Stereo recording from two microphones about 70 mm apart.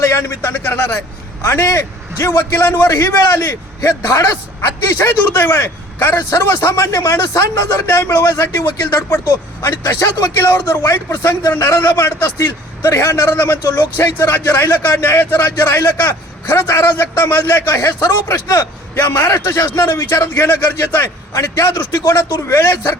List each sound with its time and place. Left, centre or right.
0.0 s a man's voice: left
0.5 s speech: left
1.4 s a man's voice: left
9.2 s a man's voice: left
10.5 s a man's voice: left
12.2 s a man's voice: left